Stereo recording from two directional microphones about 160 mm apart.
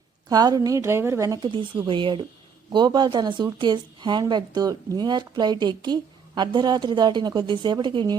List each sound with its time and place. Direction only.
0.3 s speech: 25° right (ahead or behind)